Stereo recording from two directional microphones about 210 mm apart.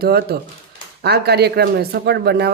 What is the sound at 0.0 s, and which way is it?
Speech, 50° right (ahead or behind).